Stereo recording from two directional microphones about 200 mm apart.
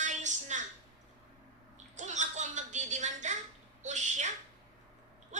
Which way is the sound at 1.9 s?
35° right (ahead or behind).